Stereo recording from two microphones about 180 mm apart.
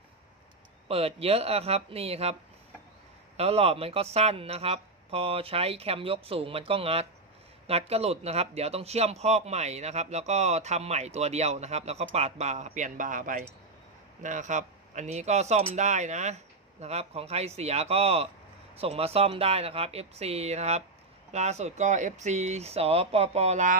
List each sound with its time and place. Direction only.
0.9 s a man's voice: 35° right (ahead or behind)
3.3 s a man's voice: 35° right (ahead or behind)